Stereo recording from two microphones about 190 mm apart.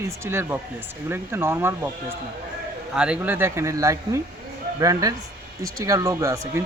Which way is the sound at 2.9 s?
5° right (ahead or behind).